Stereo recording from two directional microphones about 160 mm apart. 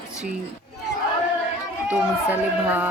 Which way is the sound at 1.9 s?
10° right (ahead or behind).